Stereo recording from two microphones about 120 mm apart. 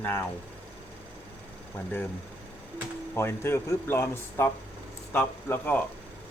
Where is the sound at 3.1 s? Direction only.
20° left (ahead or behind).